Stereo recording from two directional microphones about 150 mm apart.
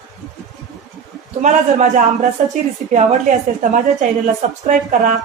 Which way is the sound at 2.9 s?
55° right (ahead or behind).